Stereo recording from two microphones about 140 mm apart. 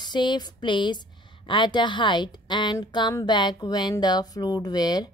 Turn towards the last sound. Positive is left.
turn(degrees=30)  # may be behind; listen again after turning